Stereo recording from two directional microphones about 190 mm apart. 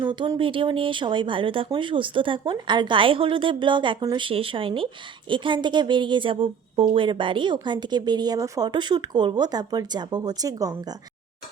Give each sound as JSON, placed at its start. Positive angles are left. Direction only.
{"t": 0.0, "sound": "a woman's voice", "side_deg": -25}